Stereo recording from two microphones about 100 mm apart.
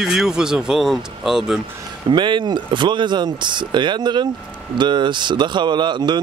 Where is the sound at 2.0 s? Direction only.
50° right (ahead or behind).